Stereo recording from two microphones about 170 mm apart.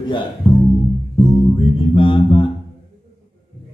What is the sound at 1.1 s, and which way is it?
Music, 30° left (ahead or behind).